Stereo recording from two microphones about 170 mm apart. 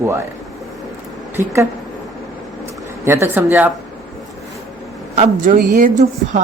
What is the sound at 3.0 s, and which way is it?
Speech, 15° right (ahead or behind).